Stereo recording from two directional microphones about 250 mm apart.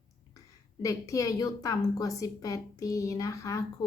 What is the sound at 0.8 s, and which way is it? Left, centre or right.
A woman's voice, centre.